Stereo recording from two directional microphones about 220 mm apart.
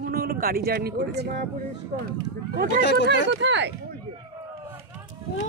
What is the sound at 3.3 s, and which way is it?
Speech, 55° right (ahead or behind).